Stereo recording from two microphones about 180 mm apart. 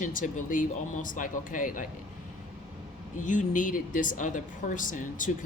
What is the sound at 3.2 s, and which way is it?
A woman's voice, 45° left (ahead or behind).